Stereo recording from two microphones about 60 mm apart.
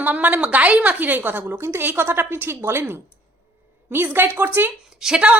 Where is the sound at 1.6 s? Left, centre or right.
Right.